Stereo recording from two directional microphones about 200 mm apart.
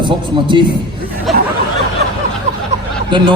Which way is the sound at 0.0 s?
25° right (ahead or behind).